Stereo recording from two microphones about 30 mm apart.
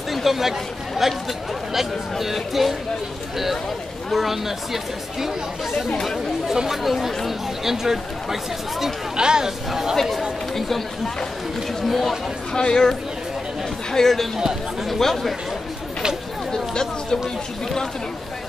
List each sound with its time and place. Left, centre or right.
0.1 s chatter: centre
1.7 s speech: centre
4.1 s speech: centre
6.4 s speech: centre
9.1 s speech: right
11.8 s speech: centre
12.5 s speech: left
13.9 s speech: centre